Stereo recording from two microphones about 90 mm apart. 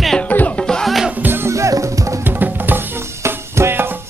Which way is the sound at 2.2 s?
20° right (ahead or behind).